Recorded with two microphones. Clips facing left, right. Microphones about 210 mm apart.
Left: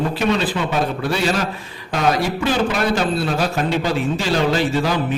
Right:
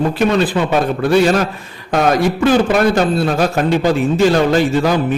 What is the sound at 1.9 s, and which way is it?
A man's voice, 50° right (ahead or behind).